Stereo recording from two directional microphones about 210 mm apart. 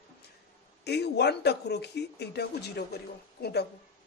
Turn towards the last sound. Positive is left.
turn(degrees=50)  # may be behind; listen again after turning